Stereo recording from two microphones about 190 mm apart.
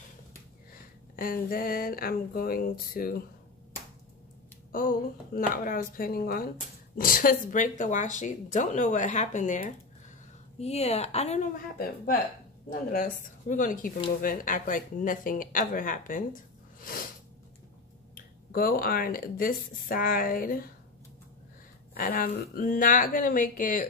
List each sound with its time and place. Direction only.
1.1 s speech: 50° left (ahead or behind)
4.7 s speech: 45° left (ahead or behind)
11.5 s speech: 50° left (ahead or behind)
16.8 s a sound: 50° left (ahead or behind)
18.1 s speech: 50° left (ahead or behind)
21.9 s speech: 50° left (ahead or behind)